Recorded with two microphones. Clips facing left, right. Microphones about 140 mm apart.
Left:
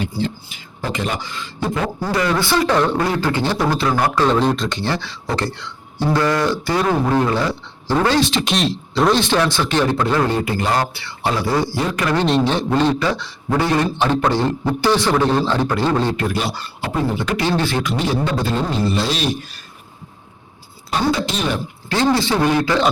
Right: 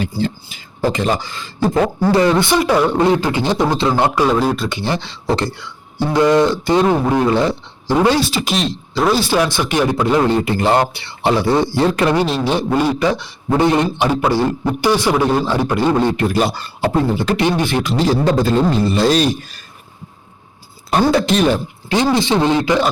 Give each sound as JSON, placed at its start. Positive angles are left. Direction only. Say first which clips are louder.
{"t": 0.0, "sound": "speech", "louder": "right 3 dB", "side_deg": -40}
{"t": 2.2, "sound": "a man's voice", "louder": "right 4 dB", "side_deg": -20}
{"t": 4.1, "sound": "speech", "louder": "right 1 dB", "side_deg": -10}
{"t": 5.5, "sound": "a sound", "louder": "even", "side_deg": -10}
{"t": 6.1, "sound": "a man's voice", "louder": "right 7 dB", "side_deg": -20}
{"t": 12.1, "sound": "a man's voice", "louder": "even", "side_deg": -5}
{"t": 16.3, "sound": "speech", "louder": "right 6 dB", "side_deg": -45}
{"t": 16.9, "sound": "speech", "louder": "right 2 dB", "side_deg": -35}
{"t": 17.6, "sound": "a man's voice", "louder": "right 3 dB", "side_deg": -20}
{"t": 17.8, "sound": "speech", "louder": "right 5 dB", "side_deg": -35}
{"t": 20.9, "sound": "speech", "louder": "right 6 dB", "side_deg": -55}
{"t": 21.8, "sound": "a man's voice", "louder": "right 2 dB", "side_deg": -15}